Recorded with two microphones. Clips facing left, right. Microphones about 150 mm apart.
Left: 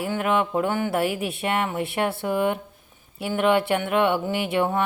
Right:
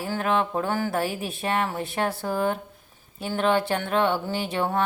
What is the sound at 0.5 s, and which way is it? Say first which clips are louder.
Music: left 2 dB; 20° left (ahead or behind).